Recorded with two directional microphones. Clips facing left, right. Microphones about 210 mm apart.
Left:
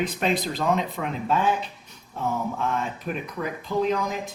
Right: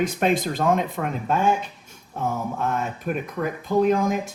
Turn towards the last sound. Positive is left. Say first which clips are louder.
# right 5 dB
turn(degrees=-50)  # may be behind; listen again after turning